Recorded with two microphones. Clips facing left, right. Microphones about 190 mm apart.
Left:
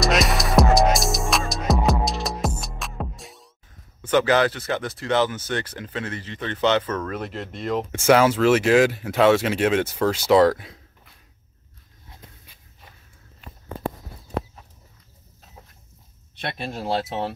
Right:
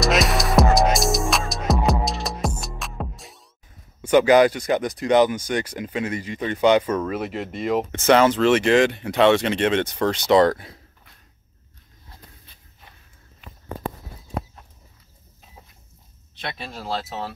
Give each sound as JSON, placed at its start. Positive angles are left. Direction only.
{"t": 0.0, "sound": "music", "side_deg": 0}
{"t": 4.0, "sound": "speech", "side_deg": -15}
{"t": 7.9, "sound": "speech", "side_deg": 10}
{"t": 16.8, "sound": "speech", "side_deg": 20}